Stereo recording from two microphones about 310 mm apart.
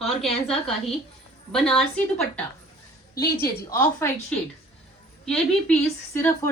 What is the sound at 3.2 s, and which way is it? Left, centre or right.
Speech, left.